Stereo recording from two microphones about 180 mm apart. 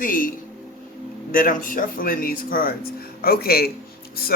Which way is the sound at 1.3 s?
50° left (ahead or behind).